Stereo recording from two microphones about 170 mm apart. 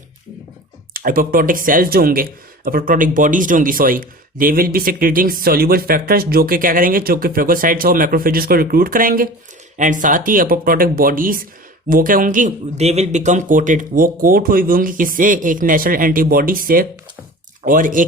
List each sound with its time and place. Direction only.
0.9 s speech: 55° right (ahead or behind)